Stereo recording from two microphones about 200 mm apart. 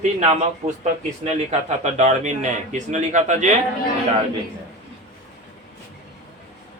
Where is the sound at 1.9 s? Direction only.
35° right (ahead or behind).